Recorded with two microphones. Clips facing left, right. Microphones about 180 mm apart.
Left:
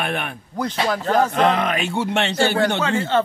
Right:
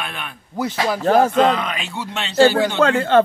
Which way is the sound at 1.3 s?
50° left (ahead or behind).